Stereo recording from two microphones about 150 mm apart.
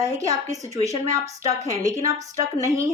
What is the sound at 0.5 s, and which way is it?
A woman's voice, 20° right (ahead or behind).